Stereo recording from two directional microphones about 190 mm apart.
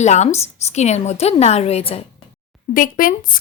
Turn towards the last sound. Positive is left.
turn(degrees=45)  # may be behind; listen again after turning